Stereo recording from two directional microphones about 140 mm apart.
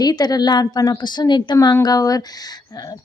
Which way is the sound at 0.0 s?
30° left (ahead or behind).